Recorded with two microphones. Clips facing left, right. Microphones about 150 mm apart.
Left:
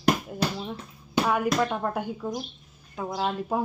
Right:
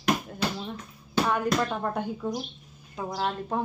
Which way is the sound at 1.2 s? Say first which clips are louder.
Left 2 dB; 10° left (ahead or behind).